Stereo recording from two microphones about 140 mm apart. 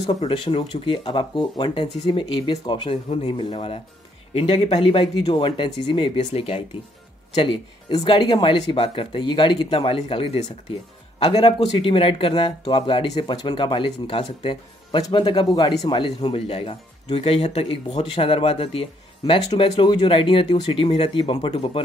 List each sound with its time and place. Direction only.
0.3 s speech: 40° left (ahead or behind)